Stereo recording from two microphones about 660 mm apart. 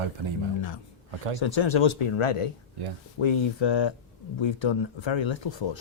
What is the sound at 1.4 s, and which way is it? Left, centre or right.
Speech, left.